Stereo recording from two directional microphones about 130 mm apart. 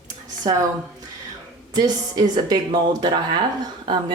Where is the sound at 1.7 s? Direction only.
30° right (ahead or behind).